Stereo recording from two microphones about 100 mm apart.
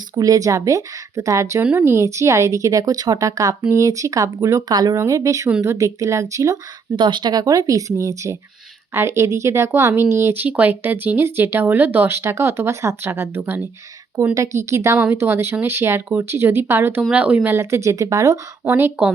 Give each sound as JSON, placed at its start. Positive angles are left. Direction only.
{"t": 0.2, "sound": "a woman's voice", "side_deg": -35}
{"t": 4.7, "sound": "speech", "side_deg": -45}
{"t": 4.9, "sound": "a woman's voice", "side_deg": -30}
{"t": 6.9, "sound": "a woman's voice", "side_deg": -50}
{"t": 14.9, "sound": "speech", "side_deg": -15}
{"t": 15.2, "sound": "speech", "side_deg": -25}
{"t": 17.1, "sound": "speech", "side_deg": -10}
{"t": 17.5, "sound": "a woman's voice", "side_deg": -25}
{"t": 18.6, "sound": "speech", "side_deg": -20}